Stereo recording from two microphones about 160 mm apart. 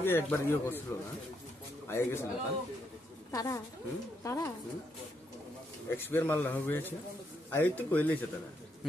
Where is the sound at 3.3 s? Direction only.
20° left (ahead or behind).